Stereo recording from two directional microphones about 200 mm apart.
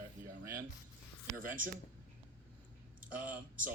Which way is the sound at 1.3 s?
40° right (ahead or behind).